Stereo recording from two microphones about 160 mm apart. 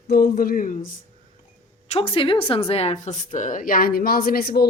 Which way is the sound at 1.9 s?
35° left (ahead or behind).